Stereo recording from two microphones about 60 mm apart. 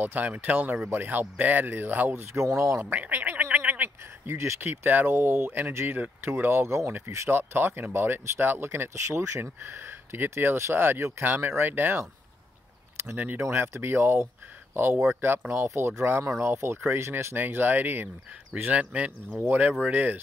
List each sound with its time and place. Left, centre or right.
0.0 s speech: right
2.8 s gargling: right
4.3 s speech: right
5.9 s speech: right
9.4 s speech: right
13.0 s speech: right
13.4 s speech: right
17.4 s speech: right